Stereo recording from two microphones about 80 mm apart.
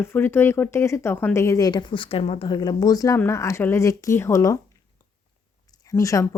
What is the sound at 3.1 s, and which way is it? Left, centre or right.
Speech, left.